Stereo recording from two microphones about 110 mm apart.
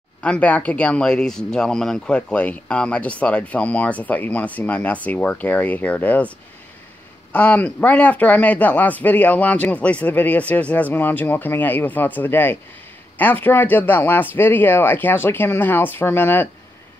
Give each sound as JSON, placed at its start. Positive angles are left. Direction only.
{"t": 0.2, "sound": "speech", "side_deg": 10}
{"t": 7.3, "sound": "speech", "side_deg": 15}